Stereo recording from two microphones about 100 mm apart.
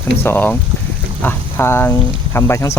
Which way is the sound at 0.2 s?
20° left (ahead or behind).